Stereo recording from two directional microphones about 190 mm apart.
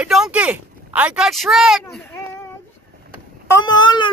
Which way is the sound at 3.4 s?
20° left (ahead or behind).